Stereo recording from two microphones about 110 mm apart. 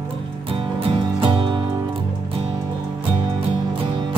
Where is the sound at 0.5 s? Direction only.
50° right (ahead or behind).